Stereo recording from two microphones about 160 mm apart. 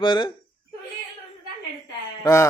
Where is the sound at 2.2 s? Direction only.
15° left (ahead or behind).